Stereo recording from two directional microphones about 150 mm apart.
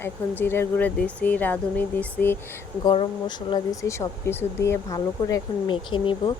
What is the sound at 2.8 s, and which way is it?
Speech, 30° left (ahead or behind).